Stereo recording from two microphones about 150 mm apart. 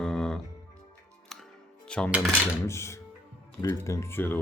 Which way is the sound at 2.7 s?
20° left (ahead or behind).